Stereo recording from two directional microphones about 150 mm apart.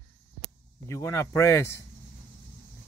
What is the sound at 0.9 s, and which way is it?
Speech, 20° left (ahead or behind).